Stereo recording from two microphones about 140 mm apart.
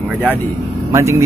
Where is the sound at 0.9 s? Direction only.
20° right (ahead or behind).